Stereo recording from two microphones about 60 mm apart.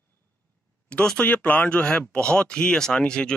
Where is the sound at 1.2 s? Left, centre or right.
Left.